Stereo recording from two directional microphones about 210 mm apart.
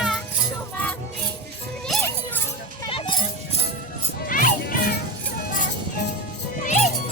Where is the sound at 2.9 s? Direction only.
25° left (ahead or behind).